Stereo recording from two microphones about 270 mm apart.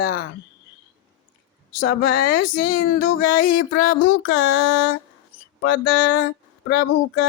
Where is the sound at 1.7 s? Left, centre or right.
Left.